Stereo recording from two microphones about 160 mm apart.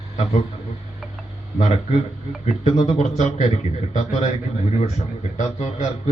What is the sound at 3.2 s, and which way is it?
A man's voice, 45° left (ahead or behind).